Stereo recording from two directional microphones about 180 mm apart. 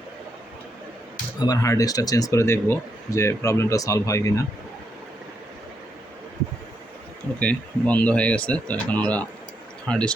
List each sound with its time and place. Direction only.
1.4 s speech: 20° left (ahead or behind)
7.3 s speech: 5° left (ahead or behind)